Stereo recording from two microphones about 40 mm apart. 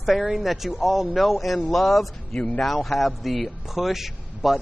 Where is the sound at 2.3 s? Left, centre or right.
Left.